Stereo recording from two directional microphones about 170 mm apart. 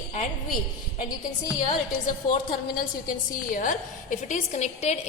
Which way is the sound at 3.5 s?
50° left (ahead or behind).